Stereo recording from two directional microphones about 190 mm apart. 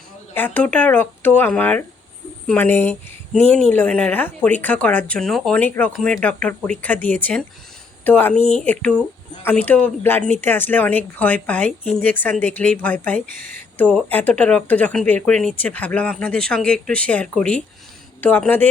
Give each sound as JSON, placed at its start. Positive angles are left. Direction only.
{"t": 0.3, "sound": "a woman's voice", "side_deg": 10}
{"t": 13.1, "sound": "speech", "side_deg": -50}
{"t": 13.5, "sound": "a woman's voice", "side_deg": 5}